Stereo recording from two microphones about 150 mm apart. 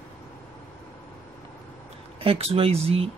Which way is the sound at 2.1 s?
40° right (ahead or behind).